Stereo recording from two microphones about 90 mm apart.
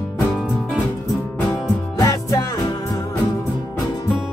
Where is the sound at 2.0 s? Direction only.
35° left (ahead or behind).